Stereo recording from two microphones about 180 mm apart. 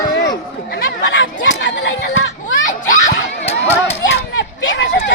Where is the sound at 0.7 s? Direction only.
75° left (ahead or behind); by 1.9 s 90° left.